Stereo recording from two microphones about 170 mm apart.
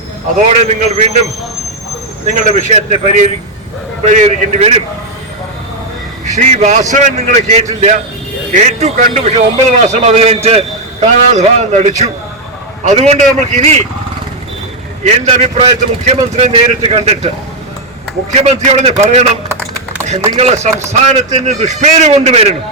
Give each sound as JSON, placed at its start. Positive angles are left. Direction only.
{"t": 0.4, "sound": "a man's voice", "side_deg": -40}
{"t": 2.2, "sound": "speech", "side_deg": -50}
{"t": 6.2, "sound": "a man's voice", "side_deg": -45}
{"t": 15.0, "sound": "a man's voice", "side_deg": -40}
{"t": 18.3, "sound": "a man's voice", "side_deg": -40}